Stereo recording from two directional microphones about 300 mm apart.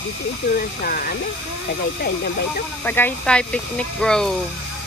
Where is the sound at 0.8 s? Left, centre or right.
Left.